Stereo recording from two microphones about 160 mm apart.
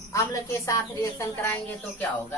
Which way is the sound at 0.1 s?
20° left (ahead or behind).